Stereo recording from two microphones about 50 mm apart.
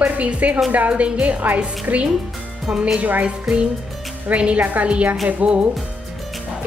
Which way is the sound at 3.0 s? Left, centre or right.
Right.